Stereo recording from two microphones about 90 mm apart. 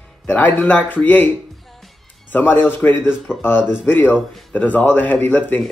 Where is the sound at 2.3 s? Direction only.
25° left (ahead or behind).